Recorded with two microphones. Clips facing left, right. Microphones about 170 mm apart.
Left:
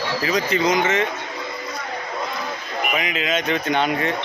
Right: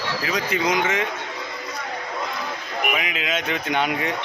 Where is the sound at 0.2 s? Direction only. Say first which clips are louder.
Left 4 dB; 5° right (ahead or behind).